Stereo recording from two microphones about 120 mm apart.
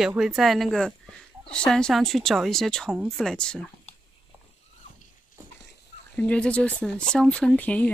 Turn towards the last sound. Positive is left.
turn(degrees=10)  # may be behind; listen again after turning